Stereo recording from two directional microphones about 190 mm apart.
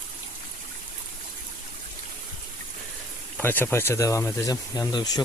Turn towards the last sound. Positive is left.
turn(degrees=20)  # may be behind; listen again after turning